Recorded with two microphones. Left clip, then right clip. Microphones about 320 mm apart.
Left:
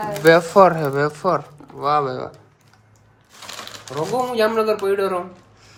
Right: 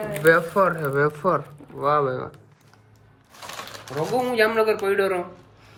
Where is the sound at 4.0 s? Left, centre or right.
Centre.